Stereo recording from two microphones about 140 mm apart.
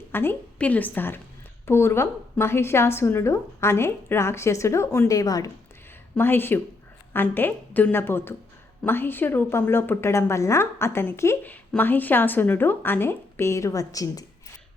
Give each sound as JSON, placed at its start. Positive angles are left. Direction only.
{"t": 0.1, "sound": "a woman's voice", "side_deg": 15}